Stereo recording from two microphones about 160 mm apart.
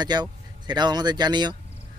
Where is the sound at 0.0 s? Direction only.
25° right (ahead or behind).